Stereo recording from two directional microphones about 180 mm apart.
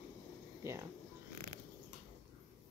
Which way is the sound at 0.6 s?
15° right (ahead or behind).